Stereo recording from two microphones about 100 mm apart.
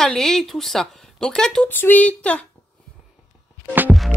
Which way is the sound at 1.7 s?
20° left (ahead or behind).